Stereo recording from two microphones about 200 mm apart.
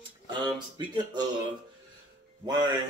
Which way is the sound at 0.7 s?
20° right (ahead or behind).